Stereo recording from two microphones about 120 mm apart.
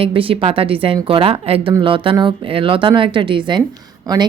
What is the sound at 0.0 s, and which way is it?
A woman's voice, 50° right (ahead or behind).